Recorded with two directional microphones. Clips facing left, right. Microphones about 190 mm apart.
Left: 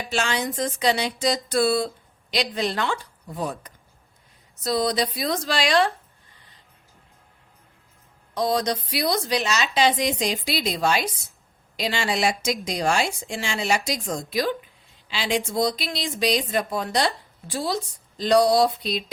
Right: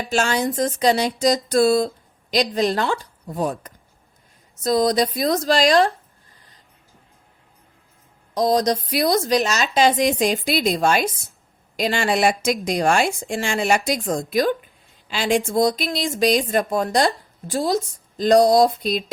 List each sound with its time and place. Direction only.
0.1 s a woman's voice: 45° right (ahead or behind)
8.4 s speech: 40° right (ahead or behind)